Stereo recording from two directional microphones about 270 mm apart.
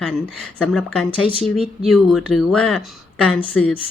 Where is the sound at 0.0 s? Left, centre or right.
Centre.